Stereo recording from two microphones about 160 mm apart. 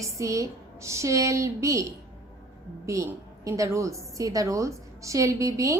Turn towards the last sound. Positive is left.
turn(degrees=-20)  # may be behind; listen again after turning